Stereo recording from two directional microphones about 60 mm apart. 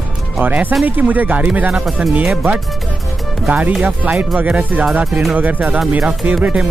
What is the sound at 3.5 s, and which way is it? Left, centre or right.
Speech, right.